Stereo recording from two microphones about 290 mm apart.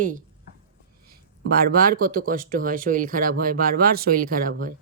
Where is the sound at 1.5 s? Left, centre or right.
Right.